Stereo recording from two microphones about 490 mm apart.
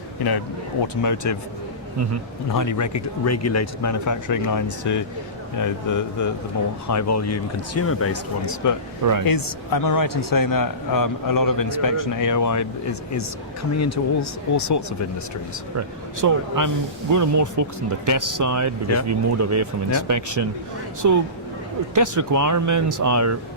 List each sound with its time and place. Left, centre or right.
1.0 s a man's voice: left
2.5 s a man's voice: left
9.2 s a man's voice: left
16.2 s speech: right